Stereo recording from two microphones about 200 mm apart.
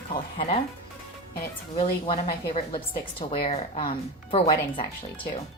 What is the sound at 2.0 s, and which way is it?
Speech, 25° left (ahead or behind).